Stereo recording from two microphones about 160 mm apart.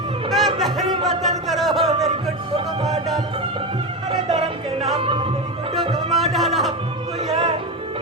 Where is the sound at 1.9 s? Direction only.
40° right (ahead or behind).